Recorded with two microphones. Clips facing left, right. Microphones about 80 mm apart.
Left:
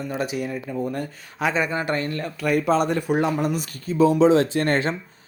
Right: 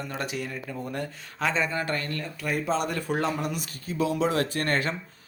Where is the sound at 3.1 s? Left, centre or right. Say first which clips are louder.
Left 4 dB; centre.